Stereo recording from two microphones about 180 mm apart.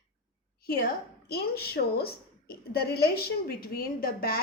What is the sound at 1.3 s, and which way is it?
A woman's voice, 60° left (ahead or behind).